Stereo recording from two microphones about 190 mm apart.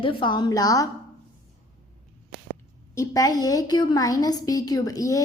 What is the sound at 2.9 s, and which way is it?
A woman's voice, 15° left (ahead or behind).